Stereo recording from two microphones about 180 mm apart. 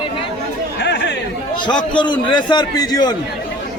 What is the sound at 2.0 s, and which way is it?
A man's voice, 25° left (ahead or behind).